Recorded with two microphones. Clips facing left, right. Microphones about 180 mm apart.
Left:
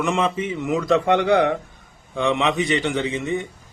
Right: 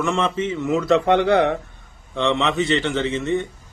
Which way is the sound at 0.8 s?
5° right (ahead or behind).